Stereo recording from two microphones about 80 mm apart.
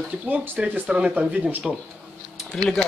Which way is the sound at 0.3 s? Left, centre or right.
Centre.